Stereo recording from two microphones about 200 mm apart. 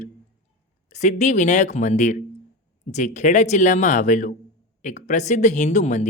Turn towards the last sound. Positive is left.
turn(degrees=35)  # may be behind; listen again after turning